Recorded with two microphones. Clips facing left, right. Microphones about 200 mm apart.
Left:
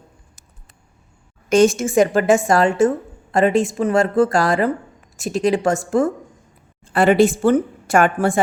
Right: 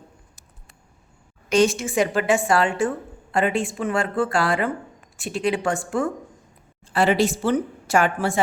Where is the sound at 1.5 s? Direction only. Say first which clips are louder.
Left 5 dB; 45° left (ahead or behind).